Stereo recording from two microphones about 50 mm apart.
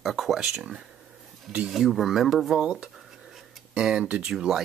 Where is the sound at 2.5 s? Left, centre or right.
Centre.